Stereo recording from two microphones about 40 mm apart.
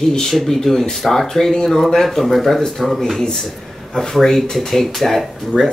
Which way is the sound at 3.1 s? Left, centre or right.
Centre.